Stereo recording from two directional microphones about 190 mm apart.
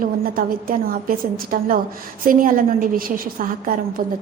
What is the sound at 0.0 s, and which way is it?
A woman's voice, 45° right (ahead or behind).